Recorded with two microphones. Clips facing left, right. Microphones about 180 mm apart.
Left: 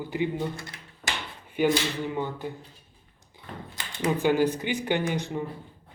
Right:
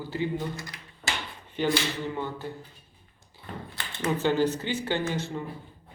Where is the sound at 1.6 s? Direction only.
10° left (ahead or behind).